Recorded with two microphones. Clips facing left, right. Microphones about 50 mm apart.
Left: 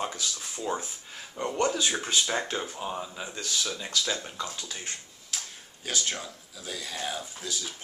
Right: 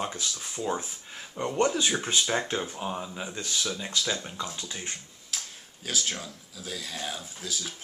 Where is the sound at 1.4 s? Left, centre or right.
Centre.